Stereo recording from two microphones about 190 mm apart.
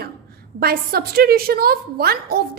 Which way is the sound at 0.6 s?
55° right (ahead or behind).